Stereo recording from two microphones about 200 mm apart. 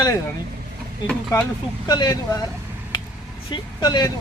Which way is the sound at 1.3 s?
15° left (ahead or behind).